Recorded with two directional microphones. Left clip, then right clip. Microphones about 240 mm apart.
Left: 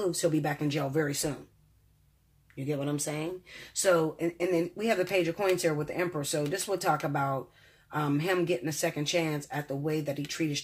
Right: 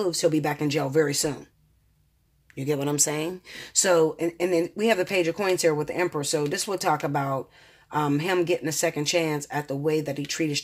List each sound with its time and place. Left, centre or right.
0.0 s speech: right
2.5 s speech: right